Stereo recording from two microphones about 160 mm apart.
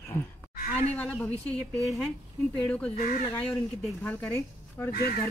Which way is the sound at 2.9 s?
50° left (ahead or behind).